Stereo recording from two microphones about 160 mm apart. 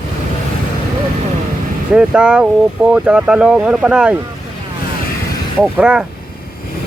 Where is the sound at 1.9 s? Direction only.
5° right (ahead or behind).